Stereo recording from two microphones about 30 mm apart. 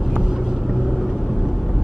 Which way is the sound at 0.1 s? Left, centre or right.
Right.